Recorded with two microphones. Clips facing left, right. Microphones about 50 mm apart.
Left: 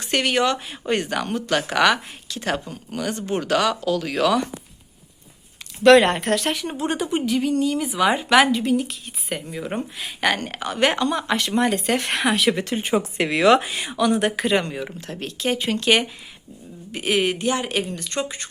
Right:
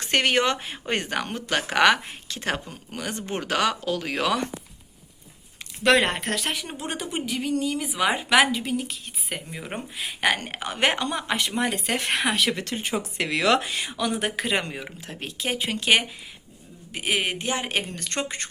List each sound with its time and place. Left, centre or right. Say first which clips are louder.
0.0 s speech: left 1 dB; right
5.8 s speech: left 7 dB; centre
10.4 s speech: left 3 dB; centre
12.5 s speech: left 6 dB; centre
13.9 s speech: left 8 dB; centre
14.5 s speech: left 5 dB; centre
17.3 s speech: left 4 dB; right